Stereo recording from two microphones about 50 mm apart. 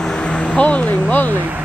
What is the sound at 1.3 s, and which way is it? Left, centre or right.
Speech, right.